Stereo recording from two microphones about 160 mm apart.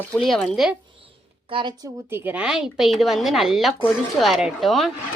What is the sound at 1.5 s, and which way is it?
Speech, 30° right (ahead or behind).